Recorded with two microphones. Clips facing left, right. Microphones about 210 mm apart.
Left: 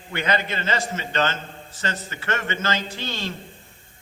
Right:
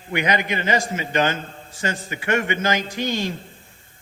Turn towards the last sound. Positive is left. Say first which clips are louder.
# right 6 dB
turn(degrees=-15)  # may be behind; listen again after turning